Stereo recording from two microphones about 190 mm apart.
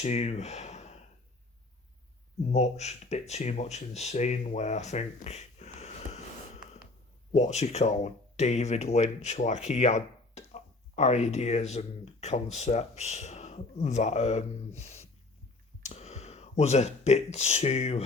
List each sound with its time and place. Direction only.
0.0 s speech: 35° left (ahead or behind)
2.5 s speech: 35° left (ahead or behind)
15.8 s a sound: 35° left (ahead or behind)
17.3 s speech: 35° left (ahead or behind)